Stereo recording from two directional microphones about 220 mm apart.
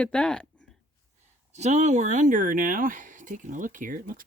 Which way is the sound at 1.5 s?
30° right (ahead or behind).